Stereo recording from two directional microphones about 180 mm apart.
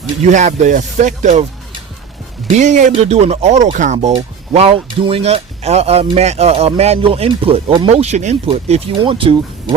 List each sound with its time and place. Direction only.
0.2 s speech: 40° right (ahead or behind)
2.6 s speech: 45° right (ahead or behind)